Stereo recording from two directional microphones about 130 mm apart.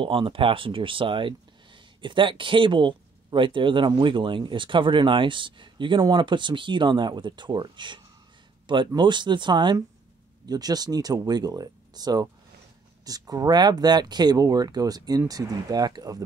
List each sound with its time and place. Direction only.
0.0 s speech: 40° right (ahead or behind)